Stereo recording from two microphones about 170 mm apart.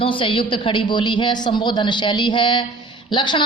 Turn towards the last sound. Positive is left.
turn(degrees=30)  # may be behind; listen again after turning